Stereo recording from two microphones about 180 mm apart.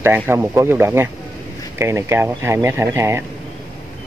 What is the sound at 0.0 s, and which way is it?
Speech, 10° right (ahead or behind).